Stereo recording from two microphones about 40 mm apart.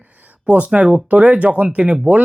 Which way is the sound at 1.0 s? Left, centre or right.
Right.